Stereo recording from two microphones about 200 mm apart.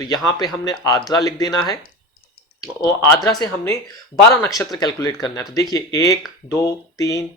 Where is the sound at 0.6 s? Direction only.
20° left (ahead or behind).